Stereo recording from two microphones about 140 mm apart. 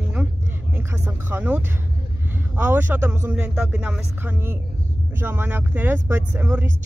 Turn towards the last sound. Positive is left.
turn(degrees=-15)  # may be behind; listen again after turning